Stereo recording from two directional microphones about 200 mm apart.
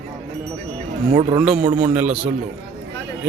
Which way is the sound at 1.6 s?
35° right (ahead or behind).